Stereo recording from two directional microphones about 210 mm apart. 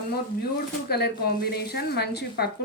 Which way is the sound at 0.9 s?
50° left (ahead or behind).